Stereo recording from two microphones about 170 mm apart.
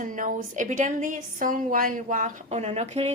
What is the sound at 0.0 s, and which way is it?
A woman's voice, 50° right (ahead or behind).